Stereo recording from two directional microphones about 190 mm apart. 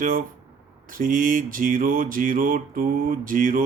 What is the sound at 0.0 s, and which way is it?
Speech, 45° right (ahead or behind).